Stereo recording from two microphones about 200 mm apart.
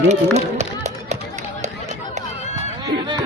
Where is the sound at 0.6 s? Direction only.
35° right (ahead or behind).